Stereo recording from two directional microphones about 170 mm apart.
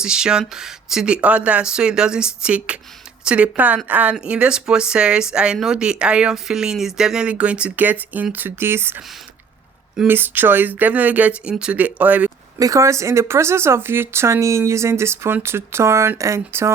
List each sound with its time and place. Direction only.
0.0 s speech: 5° right (ahead or behind)
10.0 s speech: 10° right (ahead or behind)
12.5 s speech: 20° right (ahead or behind)